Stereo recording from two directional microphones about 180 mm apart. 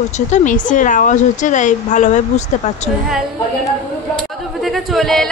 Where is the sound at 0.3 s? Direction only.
45° left (ahead or behind).